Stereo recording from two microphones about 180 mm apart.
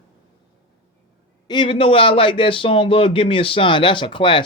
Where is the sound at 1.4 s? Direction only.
25° left (ahead or behind).